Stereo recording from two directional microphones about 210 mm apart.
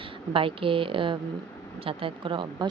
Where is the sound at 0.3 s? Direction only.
25° right (ahead or behind).